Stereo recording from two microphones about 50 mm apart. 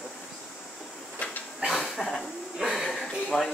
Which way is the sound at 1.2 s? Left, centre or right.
Left.